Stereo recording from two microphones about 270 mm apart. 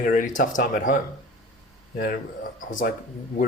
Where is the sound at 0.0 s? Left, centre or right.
Left.